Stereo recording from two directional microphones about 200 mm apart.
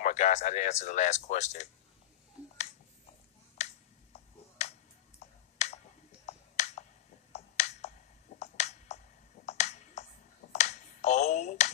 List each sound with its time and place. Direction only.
0.0 s speech: 35° left (ahead or behind)
3.5 s finger snapping: 35° left (ahead or behind)
5.6 s clicking: 35° left (ahead or behind)
6.2 s computer keyboard: 35° left (ahead or behind)
7.3 s finger snapping: 35° left (ahead or behind)